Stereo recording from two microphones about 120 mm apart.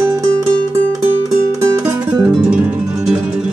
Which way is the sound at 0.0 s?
25° right (ahead or behind).